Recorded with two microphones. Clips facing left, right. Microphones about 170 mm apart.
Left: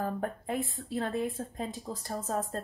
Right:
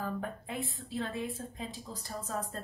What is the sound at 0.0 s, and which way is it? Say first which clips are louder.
Speech: left 4 dB; 45° left (ahead or behind).